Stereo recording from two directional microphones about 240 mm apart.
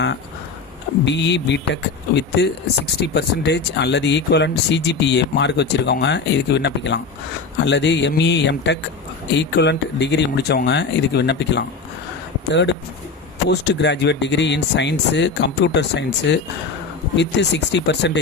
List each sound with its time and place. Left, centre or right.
1.0 s speech: left